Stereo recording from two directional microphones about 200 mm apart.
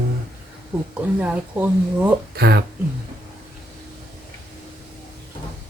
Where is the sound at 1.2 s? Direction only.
10° right (ahead or behind).